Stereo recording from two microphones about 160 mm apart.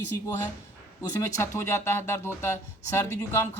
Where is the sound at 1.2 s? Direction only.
15° left (ahead or behind).